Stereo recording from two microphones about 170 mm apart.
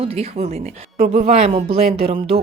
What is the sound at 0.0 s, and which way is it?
Speech, 35° right (ahead or behind).